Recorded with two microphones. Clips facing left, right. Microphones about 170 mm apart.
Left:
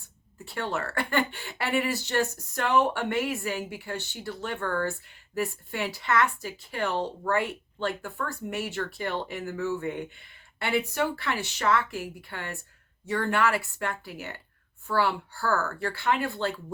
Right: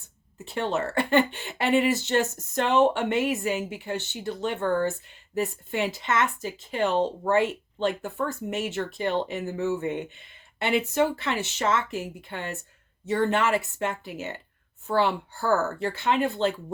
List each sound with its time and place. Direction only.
0.4 s speech: 20° right (ahead or behind)